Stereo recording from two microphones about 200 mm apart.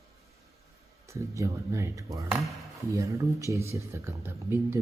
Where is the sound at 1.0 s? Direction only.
15° right (ahead or behind).